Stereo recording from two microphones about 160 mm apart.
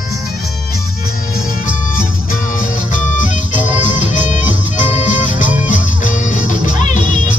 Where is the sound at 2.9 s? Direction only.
50° left (ahead or behind).